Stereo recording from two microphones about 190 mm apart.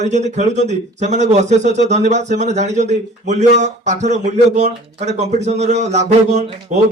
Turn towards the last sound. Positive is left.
turn(degrees=-40)  # may be behind; listen again after turning